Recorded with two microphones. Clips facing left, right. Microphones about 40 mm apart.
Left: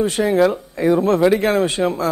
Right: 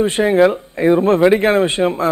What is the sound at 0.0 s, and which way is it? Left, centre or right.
Speech, right.